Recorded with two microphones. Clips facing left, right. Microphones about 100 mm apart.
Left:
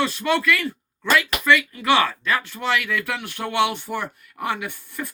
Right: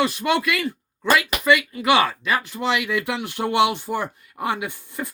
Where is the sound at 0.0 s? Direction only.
15° right (ahead or behind).